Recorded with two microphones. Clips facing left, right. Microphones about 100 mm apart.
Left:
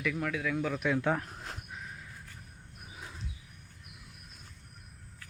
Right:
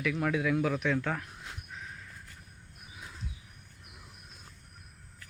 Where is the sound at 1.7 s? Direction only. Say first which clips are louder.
Even; 5° left (ahead or behind).